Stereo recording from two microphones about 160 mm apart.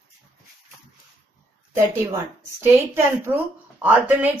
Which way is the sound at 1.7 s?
15° right (ahead or behind).